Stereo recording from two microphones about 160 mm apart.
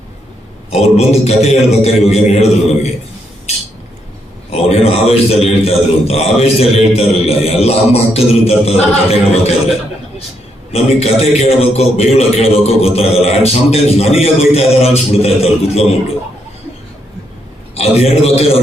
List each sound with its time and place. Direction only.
0.7 s a man's voice: 40° left (ahead or behind)
4.5 s a man's voice: 40° left (ahead or behind)
10.7 s a man's voice: 40° left (ahead or behind)
17.7 s a man's voice: 40° left (ahead or behind)